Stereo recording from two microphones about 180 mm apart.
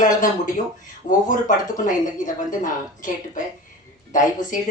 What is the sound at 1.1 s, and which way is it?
Speech, 25° left (ahead or behind).